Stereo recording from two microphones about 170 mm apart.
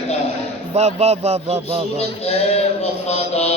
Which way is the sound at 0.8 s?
40° right (ahead or behind).